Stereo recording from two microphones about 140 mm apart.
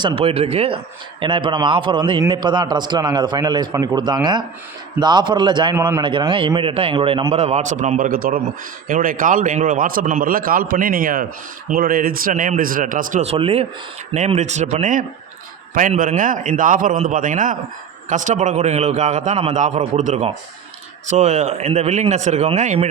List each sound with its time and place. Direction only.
0.0 s a man's voice: 40° right (ahead or behind)
5.7 s a man's voice: 15° right (ahead or behind)
6.0 s a man's voice: 35° right (ahead or behind); by 8.4 s 90° right
8.9 s a man's voice: 75° right (ahead or behind)
13.3 s a man's voice: 45° right (ahead or behind)